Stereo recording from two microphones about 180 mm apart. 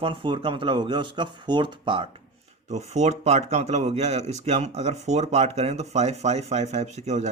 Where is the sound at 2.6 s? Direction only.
40° right (ahead or behind).